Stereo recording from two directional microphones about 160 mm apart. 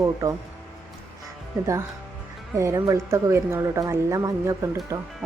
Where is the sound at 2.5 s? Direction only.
20° right (ahead or behind).